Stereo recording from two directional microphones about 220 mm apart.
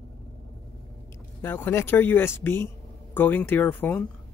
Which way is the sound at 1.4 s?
10° left (ahead or behind).